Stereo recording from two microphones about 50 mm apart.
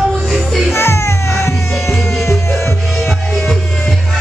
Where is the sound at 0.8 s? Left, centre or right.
Left.